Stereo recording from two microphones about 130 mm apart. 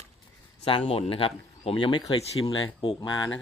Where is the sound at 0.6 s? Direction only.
45° left (ahead or behind).